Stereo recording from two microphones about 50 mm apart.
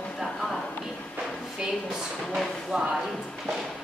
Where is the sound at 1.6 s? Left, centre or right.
Centre.